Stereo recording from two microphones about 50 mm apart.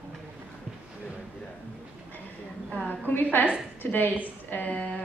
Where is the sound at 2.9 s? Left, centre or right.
Left.